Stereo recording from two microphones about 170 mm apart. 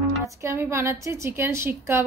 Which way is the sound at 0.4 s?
15° right (ahead or behind).